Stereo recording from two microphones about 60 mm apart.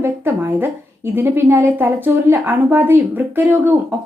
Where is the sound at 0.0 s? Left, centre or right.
Right.